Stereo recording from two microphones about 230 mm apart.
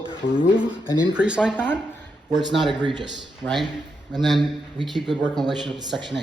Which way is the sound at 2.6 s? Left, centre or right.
Right.